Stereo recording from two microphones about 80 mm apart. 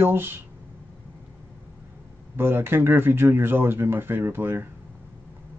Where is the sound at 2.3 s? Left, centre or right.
Right.